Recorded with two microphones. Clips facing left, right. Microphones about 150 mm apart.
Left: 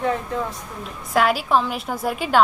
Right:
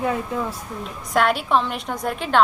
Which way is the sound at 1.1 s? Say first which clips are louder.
Left 1 dB; centre (ahead or behind).